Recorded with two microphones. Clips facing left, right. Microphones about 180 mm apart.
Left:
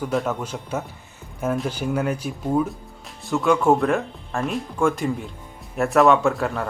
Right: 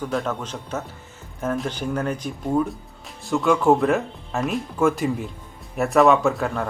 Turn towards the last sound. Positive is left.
turn(degrees=0)  # may be behind; listen again after turning